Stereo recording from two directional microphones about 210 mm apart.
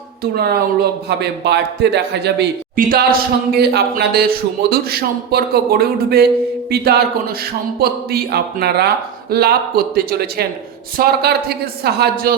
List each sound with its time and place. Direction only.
0.2 s a man's voice: 50° right (ahead or behind)